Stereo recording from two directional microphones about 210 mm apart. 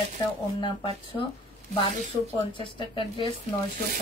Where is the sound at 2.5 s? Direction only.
25° left (ahead or behind).